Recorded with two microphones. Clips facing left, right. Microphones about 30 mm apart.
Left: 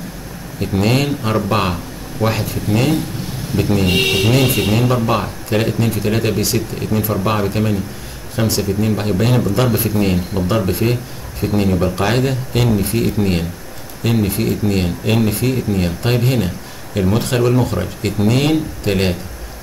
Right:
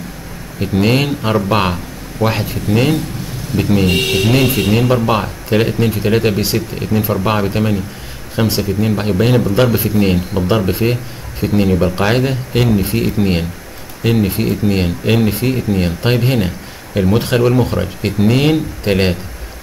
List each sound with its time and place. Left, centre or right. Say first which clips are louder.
0.6 s speech: right 2 dB; centre